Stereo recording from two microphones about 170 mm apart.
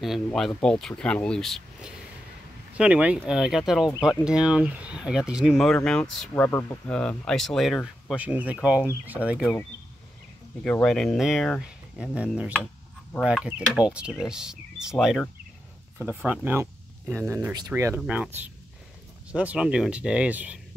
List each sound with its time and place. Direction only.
0.0 s speech: centre (ahead or behind)